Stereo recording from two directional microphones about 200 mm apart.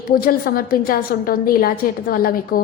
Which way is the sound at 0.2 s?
45° left (ahead or behind).